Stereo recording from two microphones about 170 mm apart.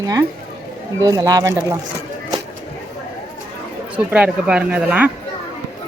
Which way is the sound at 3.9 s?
5° right (ahead or behind).